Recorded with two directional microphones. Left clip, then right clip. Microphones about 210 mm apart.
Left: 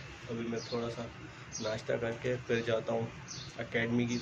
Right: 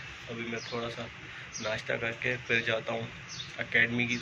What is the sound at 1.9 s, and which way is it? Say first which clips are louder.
Speech: right 1 dB; 5° left (ahead or behind).